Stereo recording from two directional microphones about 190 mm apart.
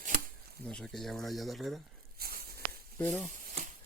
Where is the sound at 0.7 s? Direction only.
5° left (ahead or behind).